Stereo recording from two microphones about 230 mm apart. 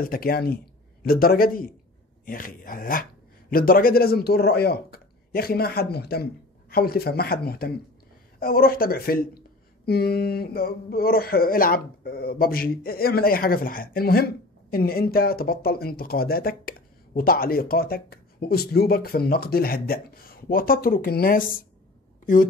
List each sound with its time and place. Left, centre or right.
0.0 s speech: left